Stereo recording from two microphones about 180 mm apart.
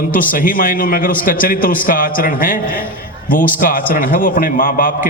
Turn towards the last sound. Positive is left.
turn(degrees=50)  # may be behind; listen again after turning